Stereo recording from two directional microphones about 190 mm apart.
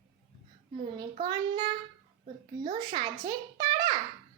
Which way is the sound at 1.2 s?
25° right (ahead or behind).